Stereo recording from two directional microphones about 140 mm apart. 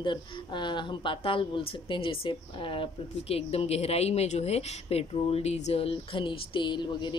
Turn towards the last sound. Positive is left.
turn(degrees=35)  # may be behind; listen again after turning